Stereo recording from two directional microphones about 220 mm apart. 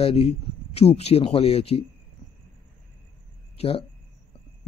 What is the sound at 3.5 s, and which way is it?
Speech, 25° left (ahead or behind).